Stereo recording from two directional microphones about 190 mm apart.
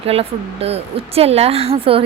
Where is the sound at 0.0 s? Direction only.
30° right (ahead or behind).